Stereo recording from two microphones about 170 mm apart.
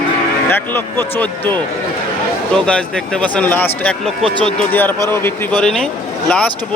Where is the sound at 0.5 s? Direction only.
15° left (ahead or behind).